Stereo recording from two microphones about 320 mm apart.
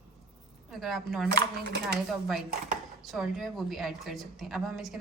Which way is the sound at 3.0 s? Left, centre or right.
Centre.